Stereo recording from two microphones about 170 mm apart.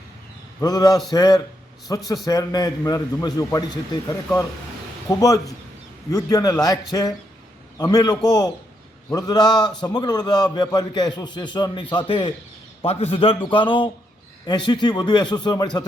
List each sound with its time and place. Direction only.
0.6 s a man's voice: 20° left (ahead or behind)
5.0 s a man's voice: 20° left (ahead or behind)